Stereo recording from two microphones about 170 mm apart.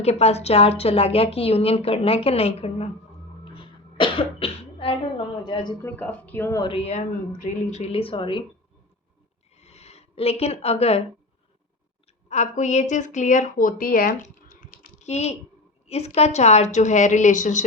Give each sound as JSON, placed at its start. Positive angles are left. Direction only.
{"t": 0.0, "sound": "a woman's voice", "side_deg": 40}
{"t": 5.8, "sound": "a woman's voice", "side_deg": 10}
{"t": 9.6, "sound": "a sound", "side_deg": 40}
{"t": 12.3, "sound": "speech", "side_deg": 45}
{"t": 15.1, "sound": "a woman's voice", "side_deg": 40}